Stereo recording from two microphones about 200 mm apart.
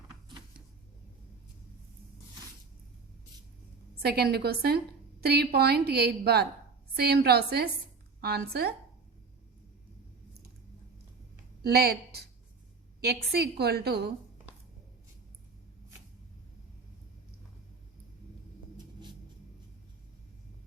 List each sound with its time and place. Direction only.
4.0 s a woman's voice: 50° right (ahead or behind)
11.6 s a woman's voice: 55° right (ahead or behind)
13.0 s a woman's voice: 55° right (ahead or behind)